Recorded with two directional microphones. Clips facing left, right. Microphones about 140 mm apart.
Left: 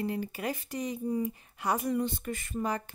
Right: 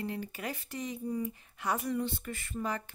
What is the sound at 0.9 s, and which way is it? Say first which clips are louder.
Speech: left 4 dB; 35° left (ahead or behind).